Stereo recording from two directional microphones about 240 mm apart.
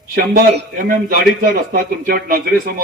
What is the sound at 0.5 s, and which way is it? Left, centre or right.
A man's voice, right.